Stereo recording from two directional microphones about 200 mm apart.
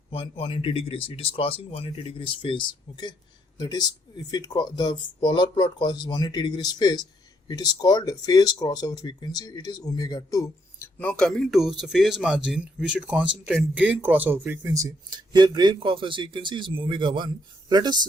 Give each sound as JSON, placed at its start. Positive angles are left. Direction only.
{"t": 0.1, "sound": "speech", "side_deg": 25}